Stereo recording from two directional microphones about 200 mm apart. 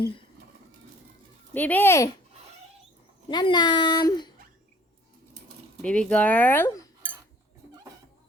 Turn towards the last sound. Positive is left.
turn(degrees=10)  # may be behind; listen again after turning